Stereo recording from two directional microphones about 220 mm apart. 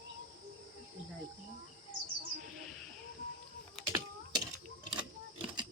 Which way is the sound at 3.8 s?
15° right (ahead or behind).